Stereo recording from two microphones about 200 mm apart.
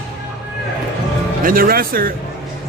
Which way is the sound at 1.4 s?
45° right (ahead or behind).